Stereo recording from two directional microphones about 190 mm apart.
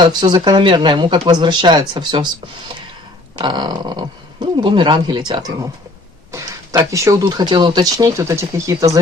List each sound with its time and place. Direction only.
0.0 s speech: 20° right (ahead or behind)
3.3 s speech: 20° right (ahead or behind)